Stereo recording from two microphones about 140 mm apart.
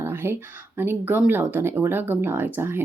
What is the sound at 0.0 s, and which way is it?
Speech, 15° right (ahead or behind).